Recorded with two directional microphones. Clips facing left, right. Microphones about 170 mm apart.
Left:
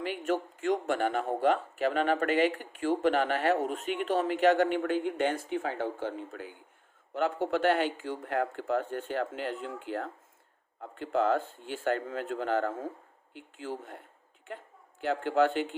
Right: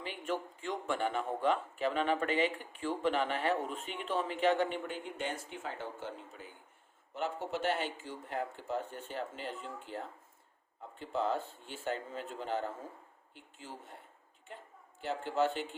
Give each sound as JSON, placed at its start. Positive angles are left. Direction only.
{"t": 0.3, "sound": "speech", "side_deg": 75}
{"t": 15.0, "sound": "speech", "side_deg": 90}